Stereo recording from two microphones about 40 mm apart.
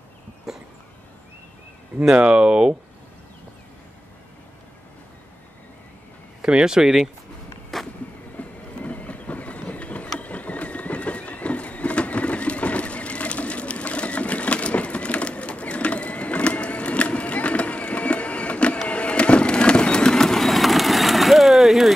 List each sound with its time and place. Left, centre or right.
0.5 s dog: centre
2.1 s speech: right
6.4 s speech: centre
7.7 s a sound: centre
8.4 s vehicle: left
10.1 s horse: left
18.9 s fireworks: left; by 21.9 s centre